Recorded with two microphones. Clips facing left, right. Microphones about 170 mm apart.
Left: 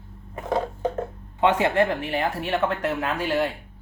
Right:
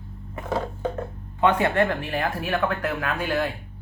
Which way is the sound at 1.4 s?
20° left (ahead or behind).